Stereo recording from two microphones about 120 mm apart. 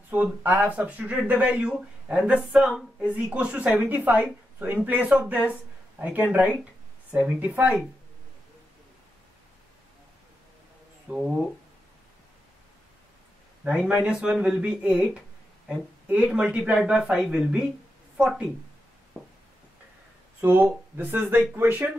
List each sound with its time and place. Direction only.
0.1 s speech: 15° right (ahead or behind)
11.1 s speech: 5° right (ahead or behind)
13.7 s speech: 5° right (ahead or behind)
19.1 s a sound: 10° right (ahead or behind)
20.3 s speech: 15° right (ahead or behind)